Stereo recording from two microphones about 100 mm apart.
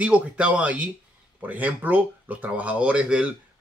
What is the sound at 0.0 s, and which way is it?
Speech, 15° right (ahead or behind).